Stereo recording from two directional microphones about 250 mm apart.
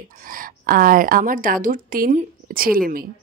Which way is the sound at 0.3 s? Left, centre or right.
Right.